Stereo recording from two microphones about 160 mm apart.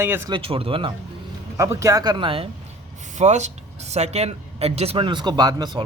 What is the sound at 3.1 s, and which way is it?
A man's voice, 45° right (ahead or behind).